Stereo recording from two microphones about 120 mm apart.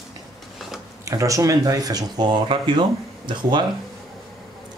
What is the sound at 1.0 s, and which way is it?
Speech, 25° right (ahead or behind).